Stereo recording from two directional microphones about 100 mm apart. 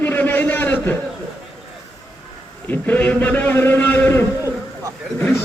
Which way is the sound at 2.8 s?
15° left (ahead or behind).